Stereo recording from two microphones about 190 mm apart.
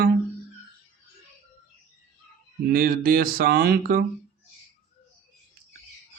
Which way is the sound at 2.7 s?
50° right (ahead or behind).